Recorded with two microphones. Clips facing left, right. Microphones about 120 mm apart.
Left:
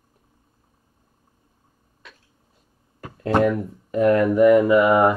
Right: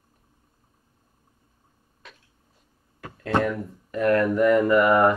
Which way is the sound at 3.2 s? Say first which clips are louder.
Left 5 dB; 20° left (ahead or behind).